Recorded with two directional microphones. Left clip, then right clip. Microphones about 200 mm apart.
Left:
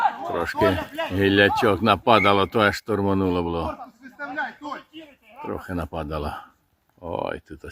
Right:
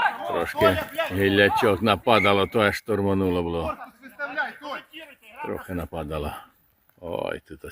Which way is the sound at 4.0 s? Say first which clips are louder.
Right 1 dB; 40° right (ahead or behind).